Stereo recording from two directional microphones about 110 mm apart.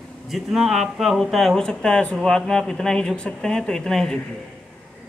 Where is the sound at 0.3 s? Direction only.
Centre (ahead or behind).